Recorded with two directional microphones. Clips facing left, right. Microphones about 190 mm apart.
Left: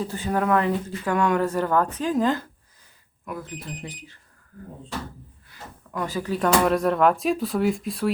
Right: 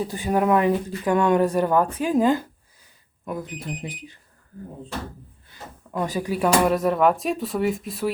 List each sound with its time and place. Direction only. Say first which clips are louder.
0.0 s speech: right 3 dB; 15° right (ahead or behind)
5.5 s speech: right 2 dB; 20° right (ahead or behind); by 8.1 s centre (ahead or behind)